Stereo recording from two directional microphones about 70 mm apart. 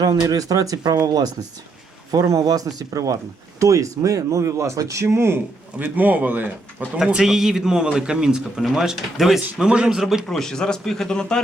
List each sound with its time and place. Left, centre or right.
0.0 s speech: right
2.1 s speech: right
2.4 s speech: right
5.8 s speech: right
7.0 s a man's voice: centre
10.2 s speech: centre